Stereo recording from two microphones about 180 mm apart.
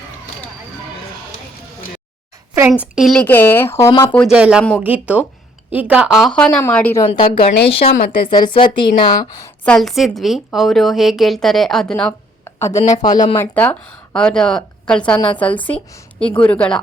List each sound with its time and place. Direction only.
2.8 s speech: 5° right (ahead or behind); by 4.2 s 15° left (ahead or behind)
4.2 s a woman's voice: 5° right (ahead or behind); by 7.0 s 10° left (ahead or behind)
7.1 s a woman's voice: 30° left (ahead or behind)
9.6 s a woman's voice: centre (ahead or behind); by 13.4 s 25° left (ahead or behind)
13.4 s speech: 10° left (ahead or behind)